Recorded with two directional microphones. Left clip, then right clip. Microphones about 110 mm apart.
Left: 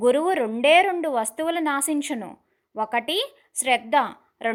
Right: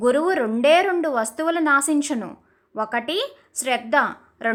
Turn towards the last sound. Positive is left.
turn(degrees=25)  # may be behind; listen again after turning